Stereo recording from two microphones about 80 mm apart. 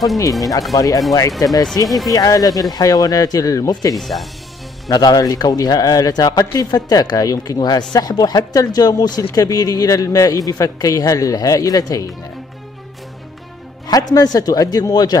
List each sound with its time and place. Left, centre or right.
0.2 s speech: left
1.9 s speech: centre
2.1 s speech: left
3.9 s speech: centre
4.8 s speech: left
13.8 s speech: left